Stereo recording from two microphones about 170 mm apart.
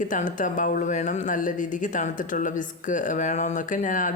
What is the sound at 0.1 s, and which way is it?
Speech, 50° left (ahead or behind).